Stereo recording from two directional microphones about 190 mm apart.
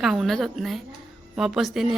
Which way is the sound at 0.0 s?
Centre (ahead or behind).